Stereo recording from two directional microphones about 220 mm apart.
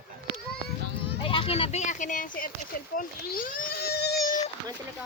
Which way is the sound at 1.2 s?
25° left (ahead or behind).